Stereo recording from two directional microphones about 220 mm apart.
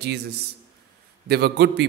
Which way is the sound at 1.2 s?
45° right (ahead or behind).